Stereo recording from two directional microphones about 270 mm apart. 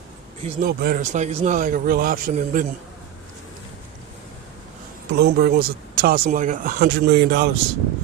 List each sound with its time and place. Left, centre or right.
0.4 s speech: right
5.1 s speech: right